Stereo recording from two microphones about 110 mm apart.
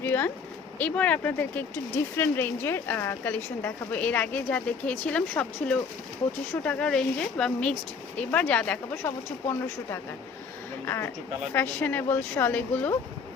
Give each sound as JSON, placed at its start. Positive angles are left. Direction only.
{"t": 0.0, "sound": "a sound", "side_deg": 20}
{"t": 0.8, "sound": "speech", "side_deg": 15}
{"t": 9.0, "sound": "speech", "side_deg": 25}